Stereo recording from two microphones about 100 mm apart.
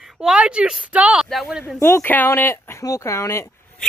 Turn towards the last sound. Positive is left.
turn(degrees=25)  # may be behind; listen again after turning